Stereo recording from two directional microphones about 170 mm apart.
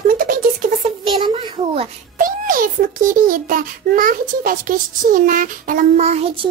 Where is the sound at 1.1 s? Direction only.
25° right (ahead or behind).